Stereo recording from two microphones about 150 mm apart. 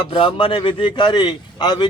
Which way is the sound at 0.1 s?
35° left (ahead or behind).